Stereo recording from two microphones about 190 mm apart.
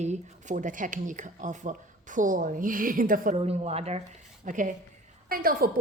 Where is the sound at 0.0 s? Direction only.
40° right (ahead or behind).